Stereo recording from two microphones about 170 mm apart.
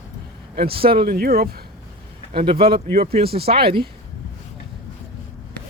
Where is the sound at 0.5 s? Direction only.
65° right (ahead or behind).